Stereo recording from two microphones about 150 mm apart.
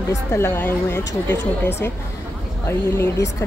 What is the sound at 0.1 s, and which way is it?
A woman's voice, 15° left (ahead or behind).